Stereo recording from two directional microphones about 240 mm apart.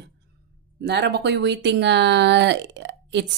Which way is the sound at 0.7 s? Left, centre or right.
Right.